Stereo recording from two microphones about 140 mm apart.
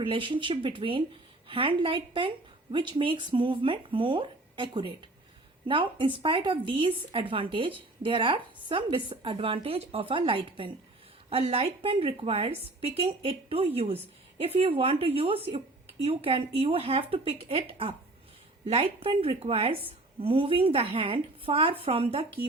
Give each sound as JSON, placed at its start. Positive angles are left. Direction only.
{"t": 0.0, "sound": "a woman's voice", "side_deg": -35}